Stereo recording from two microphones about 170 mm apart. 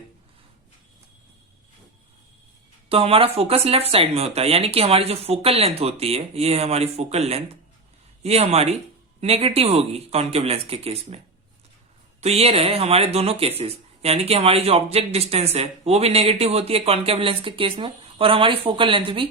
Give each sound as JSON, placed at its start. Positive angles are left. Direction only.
{"t": 2.9, "sound": "speech", "side_deg": -35}
{"t": 12.2, "sound": "speech", "side_deg": -35}